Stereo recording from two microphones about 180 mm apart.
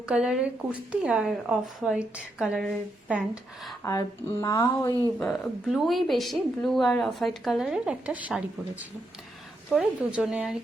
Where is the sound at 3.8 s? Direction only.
15° left (ahead or behind).